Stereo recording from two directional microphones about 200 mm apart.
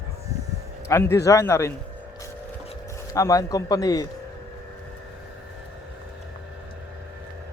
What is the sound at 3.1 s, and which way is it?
Speech, 15° left (ahead or behind).